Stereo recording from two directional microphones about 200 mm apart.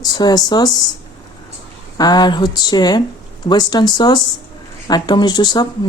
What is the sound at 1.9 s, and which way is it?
Speech, 20° left (ahead or behind).